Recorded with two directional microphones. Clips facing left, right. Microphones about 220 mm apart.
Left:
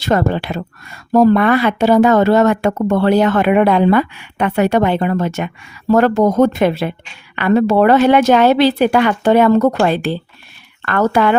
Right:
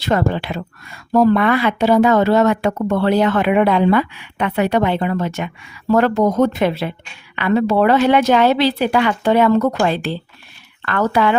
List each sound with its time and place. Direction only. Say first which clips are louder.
0.0 s speech: left 2 dB; 45° left (ahead or behind)